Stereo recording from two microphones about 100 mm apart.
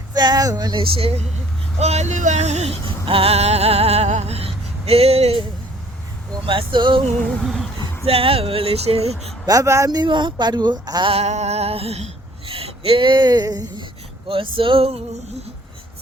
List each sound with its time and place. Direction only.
0.1 s speech: 45° right (ahead or behind)
0.8 s speech: 70° right (ahead or behind)
1.8 s a sound: 90° right
6.4 s male singing: 60° right (ahead or behind)
7.4 s a sound: 5° left (ahead or behind)
8.0 s speech: 75° right (ahead or behind)
9.5 s speech: 30° right (ahead or behind)
9.9 s speech: 45° right (ahead or behind)
11.1 s speech: 90° right; by 13.8 s 40° right (ahead or behind)
14.3 s male singing: 60° right (ahead or behind)